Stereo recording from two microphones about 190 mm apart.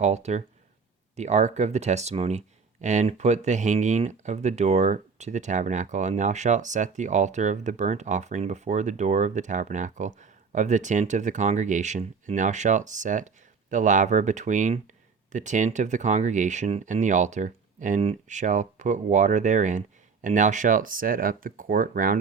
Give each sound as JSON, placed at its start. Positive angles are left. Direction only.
{"t": 0.0, "sound": "speech", "side_deg": -35}